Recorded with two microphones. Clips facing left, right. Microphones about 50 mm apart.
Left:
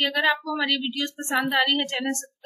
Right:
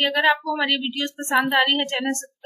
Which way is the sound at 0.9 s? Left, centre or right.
Right.